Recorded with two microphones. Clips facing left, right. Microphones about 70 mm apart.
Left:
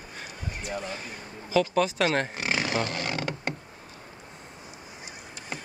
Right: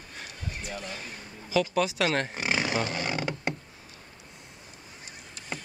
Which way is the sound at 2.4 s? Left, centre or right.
Centre.